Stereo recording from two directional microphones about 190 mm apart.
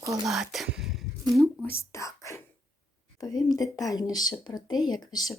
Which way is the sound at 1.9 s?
15° left (ahead or behind).